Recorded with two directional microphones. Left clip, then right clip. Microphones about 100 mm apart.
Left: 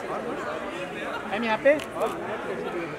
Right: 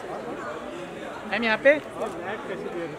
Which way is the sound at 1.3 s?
50° right (ahead or behind).